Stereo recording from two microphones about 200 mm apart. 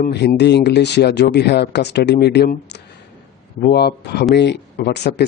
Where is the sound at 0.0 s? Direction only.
55° left (ahead or behind).